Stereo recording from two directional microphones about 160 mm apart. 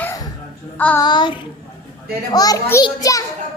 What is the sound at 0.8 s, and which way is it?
Child singing, 10° left (ahead or behind).